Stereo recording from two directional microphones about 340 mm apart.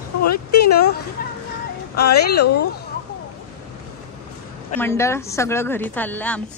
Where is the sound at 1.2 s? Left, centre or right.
Left.